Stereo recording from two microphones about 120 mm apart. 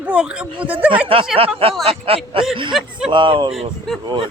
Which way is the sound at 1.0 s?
50° right (ahead or behind).